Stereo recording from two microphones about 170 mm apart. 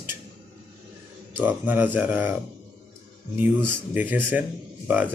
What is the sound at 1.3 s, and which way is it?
Speech, 10° right (ahead or behind).